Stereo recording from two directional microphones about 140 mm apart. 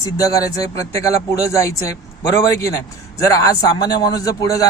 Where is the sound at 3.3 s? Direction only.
25° left (ahead or behind).